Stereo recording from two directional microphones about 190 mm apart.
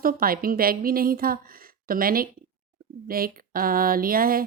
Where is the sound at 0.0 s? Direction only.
50° right (ahead or behind).